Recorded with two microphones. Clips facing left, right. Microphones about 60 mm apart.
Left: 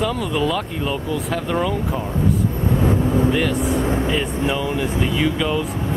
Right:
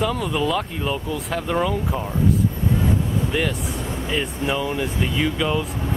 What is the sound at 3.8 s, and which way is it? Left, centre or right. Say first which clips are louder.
Speech: left 8 dB; left.